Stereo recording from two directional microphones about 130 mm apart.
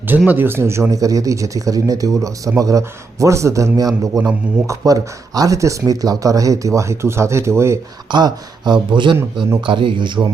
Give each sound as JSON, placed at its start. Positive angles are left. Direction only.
{"t": 0.3, "sound": "speech", "side_deg": -15}
{"t": 8.1, "sound": "speech", "side_deg": -35}